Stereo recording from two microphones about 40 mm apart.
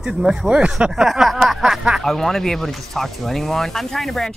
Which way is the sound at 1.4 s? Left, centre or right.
Centre.